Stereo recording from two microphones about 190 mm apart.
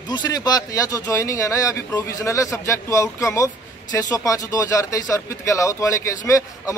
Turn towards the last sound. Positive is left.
turn(degrees=15)  # may be behind; listen again after turning